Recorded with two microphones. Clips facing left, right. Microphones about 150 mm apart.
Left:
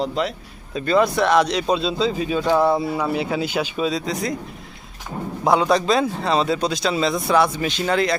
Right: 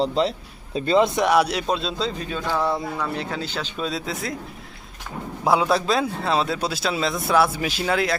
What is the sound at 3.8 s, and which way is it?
Speech, 5° right (ahead or behind).